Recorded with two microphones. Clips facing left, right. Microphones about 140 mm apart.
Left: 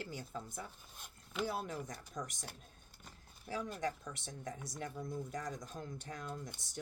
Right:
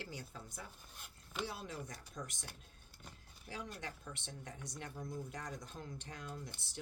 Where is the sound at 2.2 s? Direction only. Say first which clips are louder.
Left 4 dB; 90° left.